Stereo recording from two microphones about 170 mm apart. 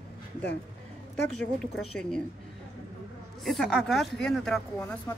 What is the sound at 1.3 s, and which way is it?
Speech, 5° left (ahead or behind).